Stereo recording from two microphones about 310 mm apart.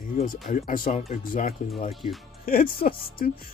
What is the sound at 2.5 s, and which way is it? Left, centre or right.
Speech, left.